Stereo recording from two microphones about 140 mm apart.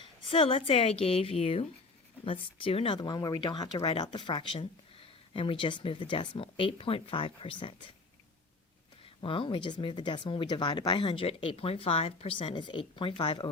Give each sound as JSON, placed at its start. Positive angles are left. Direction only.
{"t": 0.3, "sound": "a woman's voice", "side_deg": 40}
{"t": 9.2, "sound": "speech", "side_deg": 40}